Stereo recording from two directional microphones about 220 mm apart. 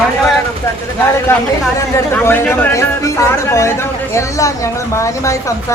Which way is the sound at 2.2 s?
10° left (ahead or behind).